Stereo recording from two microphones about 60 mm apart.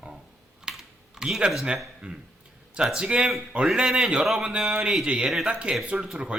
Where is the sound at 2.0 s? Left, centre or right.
Centre.